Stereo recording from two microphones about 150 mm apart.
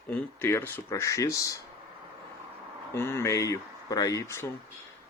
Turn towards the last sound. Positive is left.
turn(degrees=15)  # may be behind; listen again after turning